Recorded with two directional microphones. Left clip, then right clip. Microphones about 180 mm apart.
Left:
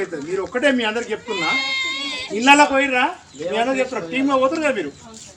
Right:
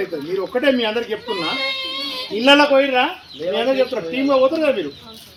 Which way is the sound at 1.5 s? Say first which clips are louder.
Left 1 dB; 35° left (ahead or behind).